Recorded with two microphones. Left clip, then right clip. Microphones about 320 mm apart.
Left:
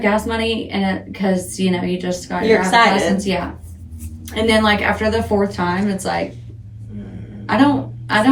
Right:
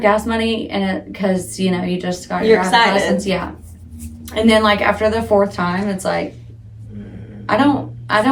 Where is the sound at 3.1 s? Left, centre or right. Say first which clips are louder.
Right 1 dB; centre.